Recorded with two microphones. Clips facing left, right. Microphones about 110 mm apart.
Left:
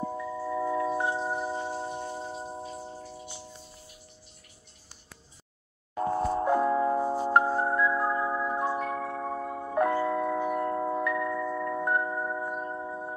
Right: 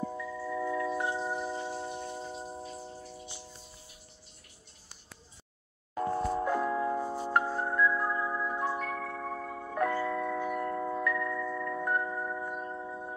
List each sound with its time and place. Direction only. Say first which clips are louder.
0.1 s wind chime: left 4 dB; 25° left (ahead or behind)
2.3 s a sound: left 3 dB; 25° left (ahead or behind)
6.0 s music: left 4 dB; 25° left (ahead or behind)